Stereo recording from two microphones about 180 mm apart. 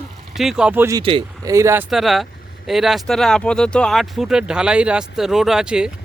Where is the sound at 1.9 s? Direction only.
Centre (ahead or behind).